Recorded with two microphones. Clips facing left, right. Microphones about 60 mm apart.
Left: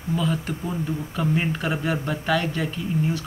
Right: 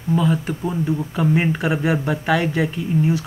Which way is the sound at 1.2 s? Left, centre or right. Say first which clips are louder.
Right 4 dB; centre.